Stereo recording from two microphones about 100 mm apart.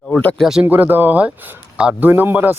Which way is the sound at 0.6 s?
20° right (ahead or behind).